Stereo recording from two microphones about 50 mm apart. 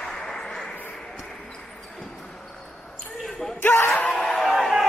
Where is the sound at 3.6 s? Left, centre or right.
Left.